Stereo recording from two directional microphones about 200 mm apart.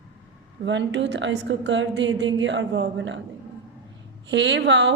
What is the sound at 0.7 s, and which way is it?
A woman's voice, 65° right (ahead or behind).